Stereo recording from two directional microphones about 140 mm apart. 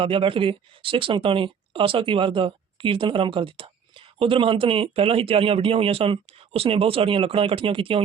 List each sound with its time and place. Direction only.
0.0 s speech: 40° right (ahead or behind)